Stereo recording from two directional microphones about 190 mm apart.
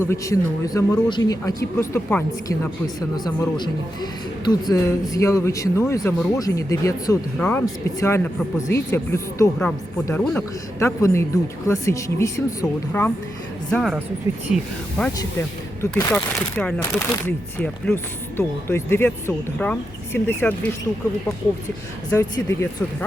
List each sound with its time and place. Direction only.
0.0 s speech: 15° left (ahead or behind)
3.2 s speech: 20° left (ahead or behind)
7.3 s speech: 5° left (ahead or behind)
7.6 s speech: 15° left (ahead or behind)
10.8 s speech: 15° left (ahead or behind)
13.7 s speech: centre (ahead or behind)
15.2 s speech: 15° left (ahead or behind)
22.1 s speech: 10° left (ahead or behind)